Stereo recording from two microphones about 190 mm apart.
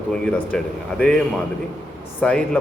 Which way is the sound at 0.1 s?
5° left (ahead or behind).